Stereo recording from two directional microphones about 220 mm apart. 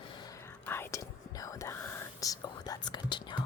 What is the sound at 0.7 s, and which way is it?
Whispering, 10° left (ahead or behind).